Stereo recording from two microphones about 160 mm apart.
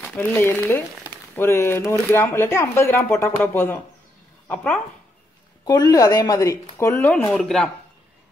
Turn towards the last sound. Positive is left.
turn(degrees=5)  # may be behind; listen again after turning